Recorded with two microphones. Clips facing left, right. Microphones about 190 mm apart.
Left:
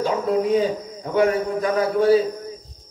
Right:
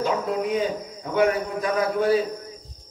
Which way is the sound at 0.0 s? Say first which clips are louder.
Left 4 dB; 35° left (ahead or behind).